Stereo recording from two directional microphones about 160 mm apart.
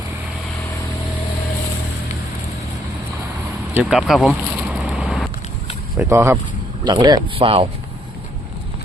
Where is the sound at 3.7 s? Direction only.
5° right (ahead or behind).